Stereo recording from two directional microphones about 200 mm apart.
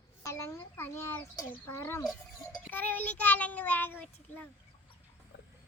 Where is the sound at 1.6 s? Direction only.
10° left (ahead or behind).